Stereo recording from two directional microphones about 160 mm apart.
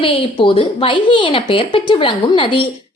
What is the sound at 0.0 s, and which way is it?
A woman's voice, 30° left (ahead or behind).